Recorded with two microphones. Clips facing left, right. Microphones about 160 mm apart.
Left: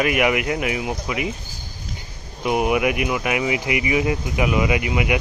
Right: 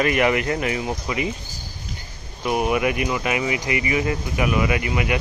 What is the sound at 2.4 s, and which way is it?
Speech, 20° left (ahead or behind).